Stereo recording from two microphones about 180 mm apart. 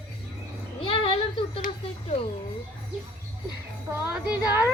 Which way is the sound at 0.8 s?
30° left (ahead or behind).